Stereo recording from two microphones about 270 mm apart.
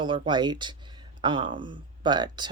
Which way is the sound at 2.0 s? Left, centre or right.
Centre.